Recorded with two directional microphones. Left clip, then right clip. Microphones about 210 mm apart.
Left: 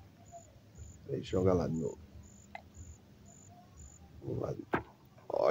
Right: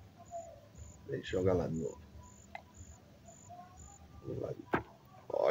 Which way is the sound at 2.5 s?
Centre (ahead or behind).